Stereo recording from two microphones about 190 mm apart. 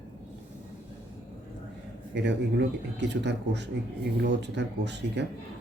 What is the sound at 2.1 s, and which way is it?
A man's voice, 65° right (ahead or behind).